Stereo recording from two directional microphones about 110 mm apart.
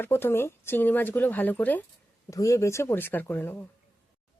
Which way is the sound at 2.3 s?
30° left (ahead or behind).